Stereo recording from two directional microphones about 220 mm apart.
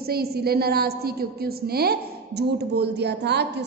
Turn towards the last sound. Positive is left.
turn(degrees=-50)  # may be behind; listen again after turning